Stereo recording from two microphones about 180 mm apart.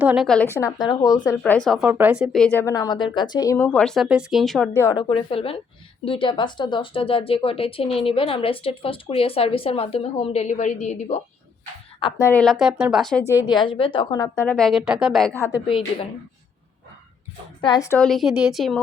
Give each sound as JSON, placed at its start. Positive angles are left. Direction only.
{"t": 0.0, "sound": "a woman's voice", "side_deg": -10}
{"t": 0.5, "sound": "speech", "side_deg": 20}
{"t": 1.5, "sound": "a woman's voice", "side_deg": 5}
{"t": 4.8, "sound": "speech", "side_deg": 20}
{"t": 5.0, "sound": "speech", "side_deg": 30}
{"t": 12.2, "sound": "a woman's voice", "side_deg": 5}
{"t": 13.5, "sound": "speech", "side_deg": 25}
{"t": 14.3, "sound": "a woman's voice", "side_deg": 5}
{"t": 17.6, "sound": "speech", "side_deg": 20}
{"t": 17.9, "sound": "a woman's voice", "side_deg": 0}